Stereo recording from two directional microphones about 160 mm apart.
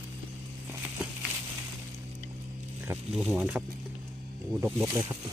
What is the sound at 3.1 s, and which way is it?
Speech, 5° right (ahead or behind).